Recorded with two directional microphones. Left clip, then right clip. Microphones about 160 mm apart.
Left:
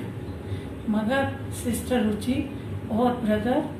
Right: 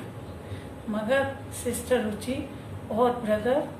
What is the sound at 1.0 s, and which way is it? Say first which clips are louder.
A woman's voice: right 1 dB; 10° right (ahead or behind).